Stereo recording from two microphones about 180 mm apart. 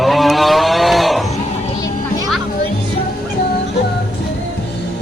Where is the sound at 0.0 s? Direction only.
Centre (ahead or behind).